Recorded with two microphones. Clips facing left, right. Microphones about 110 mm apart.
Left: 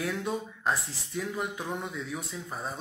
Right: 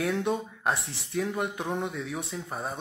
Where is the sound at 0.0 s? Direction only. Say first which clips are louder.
Right 4 dB; 25° right (ahead or behind).